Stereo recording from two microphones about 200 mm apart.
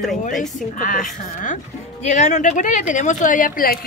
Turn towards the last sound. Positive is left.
turn(degrees=45)  # may be behind; listen again after turning